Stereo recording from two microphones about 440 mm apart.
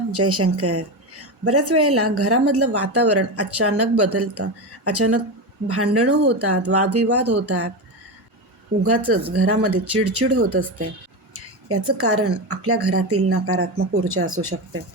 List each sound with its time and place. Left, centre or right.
0.1 s a woman's voice: right
9.3 s a woman's voice: right